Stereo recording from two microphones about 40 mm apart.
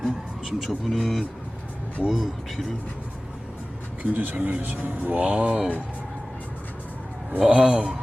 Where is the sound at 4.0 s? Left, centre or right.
Right.